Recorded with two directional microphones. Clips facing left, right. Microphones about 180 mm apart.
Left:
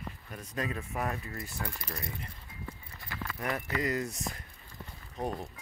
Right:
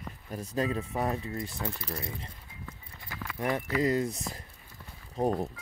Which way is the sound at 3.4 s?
25° right (ahead or behind).